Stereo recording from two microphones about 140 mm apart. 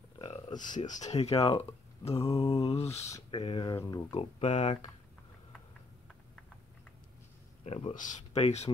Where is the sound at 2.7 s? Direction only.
50° left (ahead or behind).